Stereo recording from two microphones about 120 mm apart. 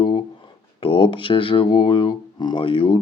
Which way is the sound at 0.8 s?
45° left (ahead or behind).